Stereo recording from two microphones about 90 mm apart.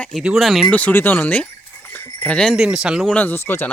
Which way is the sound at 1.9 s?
15° left (ahead or behind).